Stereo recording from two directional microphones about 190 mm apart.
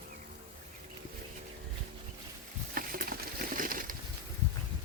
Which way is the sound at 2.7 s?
50° right (ahead or behind).